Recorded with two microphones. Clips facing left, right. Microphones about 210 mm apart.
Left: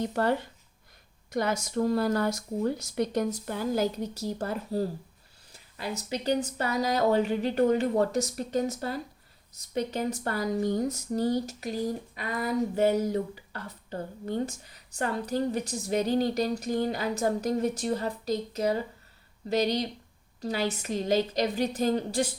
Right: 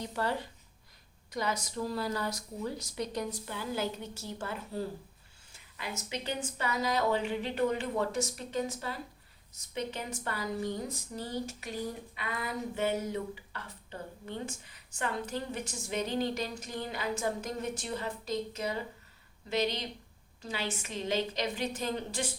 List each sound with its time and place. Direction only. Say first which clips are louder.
0.0 s speech: left 7 dB; 55° left (ahead or behind); by 22.3 s 40° left (ahead or behind)